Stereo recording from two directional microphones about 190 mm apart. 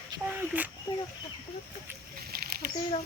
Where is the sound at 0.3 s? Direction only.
10° right (ahead or behind).